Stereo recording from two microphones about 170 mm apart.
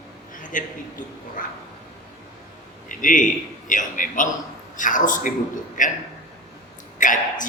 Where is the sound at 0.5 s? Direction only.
50° left (ahead or behind).